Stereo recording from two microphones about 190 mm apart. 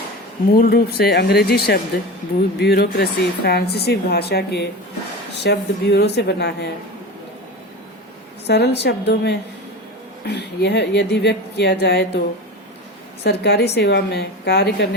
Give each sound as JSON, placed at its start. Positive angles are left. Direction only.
{"t": 0.4, "sound": "speech", "side_deg": 50}
{"t": 8.4, "sound": "speech", "side_deg": 60}
{"t": 13.2, "sound": "speech", "side_deg": 60}